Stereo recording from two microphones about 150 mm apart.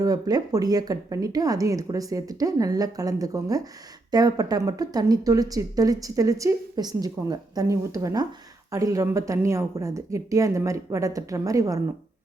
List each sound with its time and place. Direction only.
0.0 s speech: 25° right (ahead or behind)